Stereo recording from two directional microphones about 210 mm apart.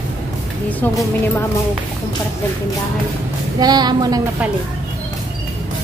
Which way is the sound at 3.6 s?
20° right (ahead or behind).